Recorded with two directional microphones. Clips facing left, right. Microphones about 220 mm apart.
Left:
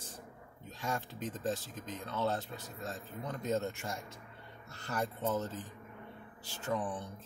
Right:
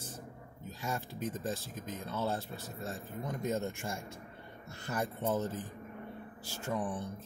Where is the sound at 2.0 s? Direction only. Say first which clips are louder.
Left 1 dB; 10° right (ahead or behind).